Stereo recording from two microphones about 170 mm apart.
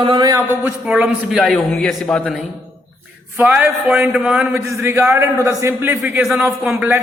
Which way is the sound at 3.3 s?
10° right (ahead or behind).